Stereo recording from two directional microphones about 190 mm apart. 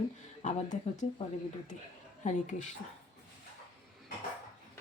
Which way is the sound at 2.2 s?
40° left (ahead or behind).